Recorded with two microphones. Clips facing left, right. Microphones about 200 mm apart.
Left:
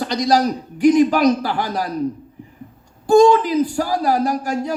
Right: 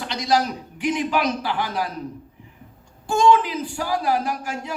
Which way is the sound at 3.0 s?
40° left (ahead or behind).